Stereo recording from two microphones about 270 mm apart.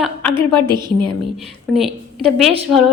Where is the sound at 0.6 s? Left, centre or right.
Centre.